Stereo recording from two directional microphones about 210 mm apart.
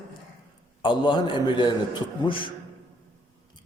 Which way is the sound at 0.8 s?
20° left (ahead or behind).